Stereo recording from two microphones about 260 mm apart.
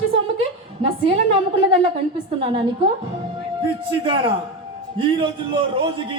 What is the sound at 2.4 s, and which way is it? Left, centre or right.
Speech, right.